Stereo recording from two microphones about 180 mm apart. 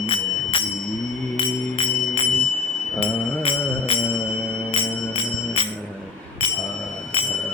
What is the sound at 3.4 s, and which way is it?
Music, 30° left (ahead or behind).